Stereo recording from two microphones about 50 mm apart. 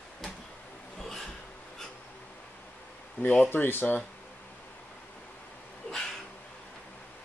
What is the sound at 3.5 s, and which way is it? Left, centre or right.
Speech, left.